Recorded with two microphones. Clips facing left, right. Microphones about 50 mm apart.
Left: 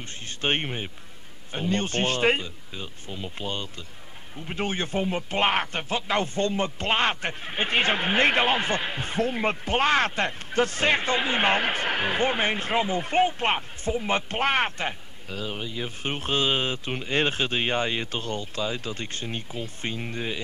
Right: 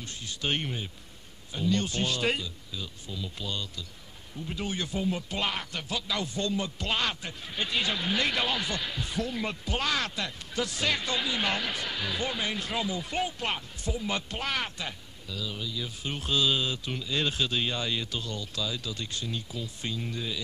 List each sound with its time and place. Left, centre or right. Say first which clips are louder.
0.0 s speech: left 4 dB; left